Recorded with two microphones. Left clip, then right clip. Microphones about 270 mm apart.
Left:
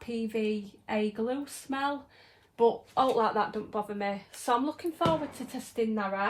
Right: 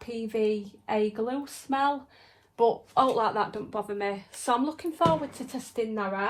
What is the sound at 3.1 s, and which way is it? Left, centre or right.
A woman's voice, right.